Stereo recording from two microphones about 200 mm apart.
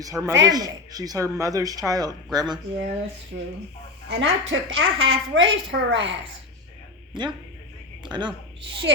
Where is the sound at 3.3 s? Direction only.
55° right (ahead or behind).